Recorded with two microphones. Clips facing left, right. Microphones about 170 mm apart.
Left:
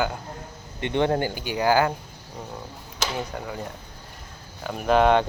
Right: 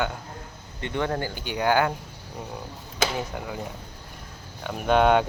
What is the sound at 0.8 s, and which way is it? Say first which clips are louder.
Speech: left 5 dB; 25° left (ahead or behind).